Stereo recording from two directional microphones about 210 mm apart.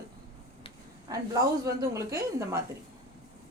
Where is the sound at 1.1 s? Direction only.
15° right (ahead or behind).